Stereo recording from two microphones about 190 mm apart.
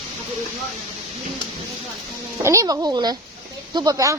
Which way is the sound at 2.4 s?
15° right (ahead or behind).